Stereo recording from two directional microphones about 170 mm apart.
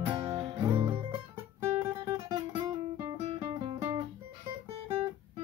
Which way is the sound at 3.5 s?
30° right (ahead or behind).